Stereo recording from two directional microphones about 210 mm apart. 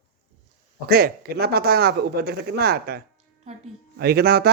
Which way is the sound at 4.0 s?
50° right (ahead or behind).